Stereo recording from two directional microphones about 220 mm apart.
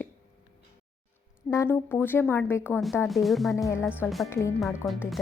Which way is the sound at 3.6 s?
15° left (ahead or behind).